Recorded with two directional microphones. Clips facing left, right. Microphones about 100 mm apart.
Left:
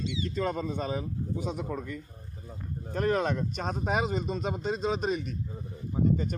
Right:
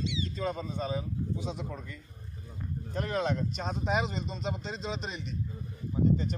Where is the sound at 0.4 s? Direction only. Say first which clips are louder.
Left 4 dB; 60° left (ahead or behind).